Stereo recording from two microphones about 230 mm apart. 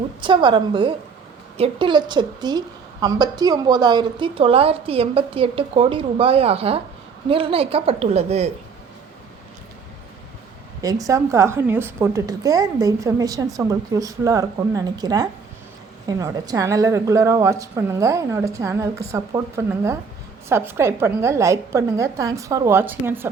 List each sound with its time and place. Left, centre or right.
0.2 s a woman's voice: right
10.8 s a woman's voice: centre